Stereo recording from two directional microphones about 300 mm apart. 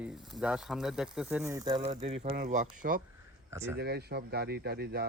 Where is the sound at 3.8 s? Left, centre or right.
Right.